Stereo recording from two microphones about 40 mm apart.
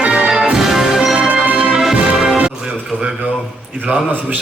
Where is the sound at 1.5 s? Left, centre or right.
Right.